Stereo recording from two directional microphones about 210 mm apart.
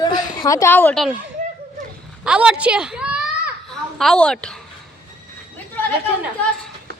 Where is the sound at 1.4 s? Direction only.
40° right (ahead or behind).